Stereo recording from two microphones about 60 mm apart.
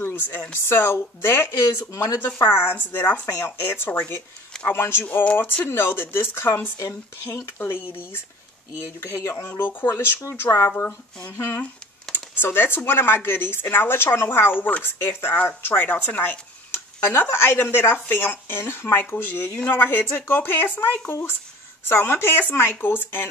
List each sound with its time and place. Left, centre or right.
0.0 s a sound: left
0.5 s speech: left
1.9 s speech: left
2.4 s speech: left
2.7 s speech: left
5.0 s speech: left
5.7 s speech: left
9.5 s speech: left